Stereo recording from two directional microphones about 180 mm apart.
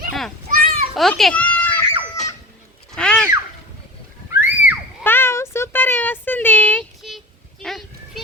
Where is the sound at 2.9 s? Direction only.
5° left (ahead or behind).